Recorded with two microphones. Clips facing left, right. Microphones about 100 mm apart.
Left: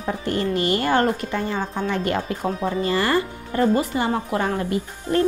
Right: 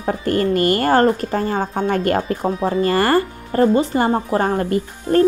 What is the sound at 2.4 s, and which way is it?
Speech, 35° right (ahead or behind).